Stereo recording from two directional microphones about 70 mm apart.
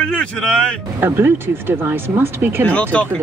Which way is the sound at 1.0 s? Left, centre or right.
Right.